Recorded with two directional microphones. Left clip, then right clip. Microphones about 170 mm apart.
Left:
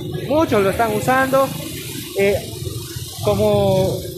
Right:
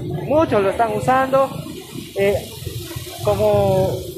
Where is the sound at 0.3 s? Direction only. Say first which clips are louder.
Even; 25° left (ahead or behind).